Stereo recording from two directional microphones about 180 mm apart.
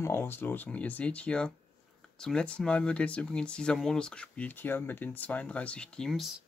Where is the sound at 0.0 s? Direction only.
10° left (ahead or behind).